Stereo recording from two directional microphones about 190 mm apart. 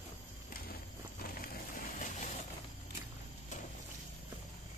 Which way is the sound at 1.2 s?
50° left (ahead or behind).